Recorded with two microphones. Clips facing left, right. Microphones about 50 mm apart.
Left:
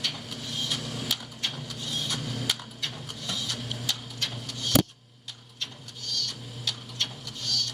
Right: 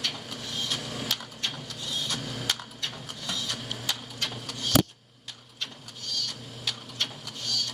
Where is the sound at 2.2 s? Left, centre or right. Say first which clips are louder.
Even; centre.